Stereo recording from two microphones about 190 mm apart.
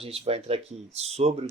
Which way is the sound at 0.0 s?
30° right (ahead or behind).